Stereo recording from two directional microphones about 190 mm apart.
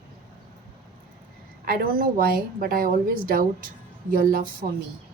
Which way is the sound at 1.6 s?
50° right (ahead or behind).